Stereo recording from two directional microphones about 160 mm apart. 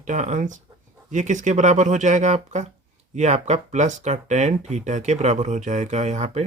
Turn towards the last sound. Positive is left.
turn(degrees=-45)  # may be behind; listen again after turning